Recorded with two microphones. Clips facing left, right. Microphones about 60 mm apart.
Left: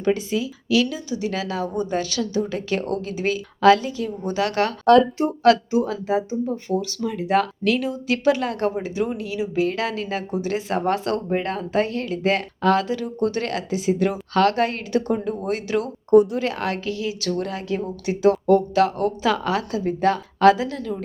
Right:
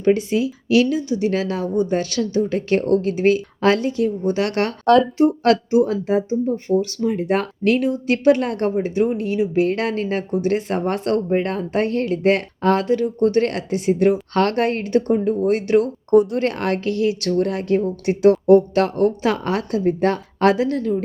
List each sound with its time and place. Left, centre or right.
0.0 s speech: right
4.9 s speech: centre
5.4 s speech: right
6.7 s speech: left
7.0 s speech: right
15.1 s speech: right
16.0 s speech: centre
16.4 s speech: right